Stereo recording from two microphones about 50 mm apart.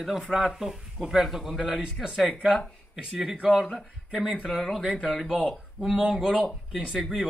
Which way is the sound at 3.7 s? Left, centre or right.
Centre.